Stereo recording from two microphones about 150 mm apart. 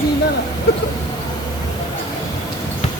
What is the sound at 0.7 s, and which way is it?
Speech, 90° left.